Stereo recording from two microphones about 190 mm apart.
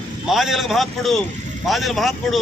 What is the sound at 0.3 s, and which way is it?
A man's voice, centre (ahead or behind).